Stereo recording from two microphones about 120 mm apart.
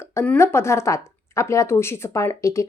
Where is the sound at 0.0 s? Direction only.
20° left (ahead or behind).